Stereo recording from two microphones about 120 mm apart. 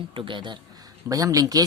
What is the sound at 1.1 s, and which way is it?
Speech, 30° right (ahead or behind).